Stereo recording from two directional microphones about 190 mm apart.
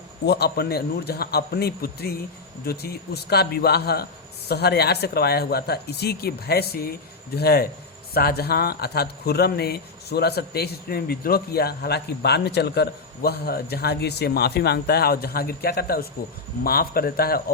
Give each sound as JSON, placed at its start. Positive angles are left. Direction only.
{"t": 0.3, "sound": "speech", "side_deg": 60}